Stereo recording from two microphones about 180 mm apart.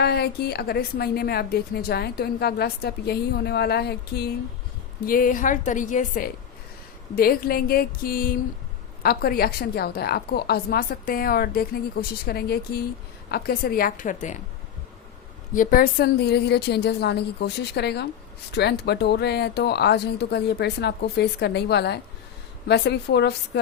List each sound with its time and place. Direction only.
0.0 s a woman's voice: 65° left (ahead or behind)
5.0 s a woman's voice: 50° left (ahead or behind)
15.5 s a woman's voice: 50° left (ahead or behind); by 23.3 s 65° left (ahead or behind)